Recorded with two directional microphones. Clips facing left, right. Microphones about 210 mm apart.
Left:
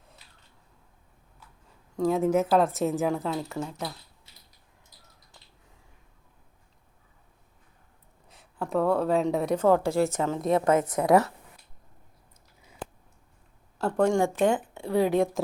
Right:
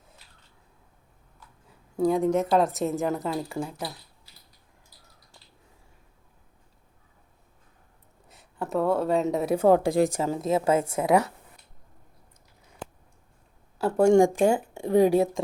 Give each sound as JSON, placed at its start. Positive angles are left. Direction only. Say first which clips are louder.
{"t": 2.0, "sound": "a woman's voice", "louder": "even", "side_deg": 0}
{"t": 8.3, "sound": "speech", "louder": "even", "side_deg": 0}
{"t": 9.6, "sound": "a woman's voice", "louder": "right 3 dB", "side_deg": -15}
{"t": 10.7, "sound": "a woman's voice", "louder": "even", "side_deg": -30}
{"t": 11.0, "sound": "a woman's voice", "louder": "left 2 dB", "side_deg": 0}
{"t": 13.7, "sound": "a woman's voice", "louder": "right 5 dB", "side_deg": -5}